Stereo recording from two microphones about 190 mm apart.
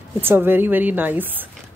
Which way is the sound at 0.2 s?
10° right (ahead or behind).